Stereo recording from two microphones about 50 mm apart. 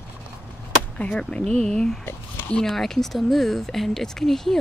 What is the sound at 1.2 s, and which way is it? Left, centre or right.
Speech, centre.